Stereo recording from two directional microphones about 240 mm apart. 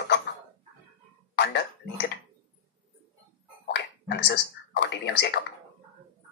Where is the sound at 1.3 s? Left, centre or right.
Left.